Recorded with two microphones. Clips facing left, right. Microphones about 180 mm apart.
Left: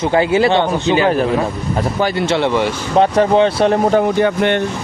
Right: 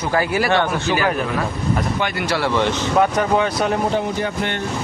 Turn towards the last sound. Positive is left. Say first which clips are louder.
# left 9 dB
turn(degrees=70)  # may be behind; listen again after turning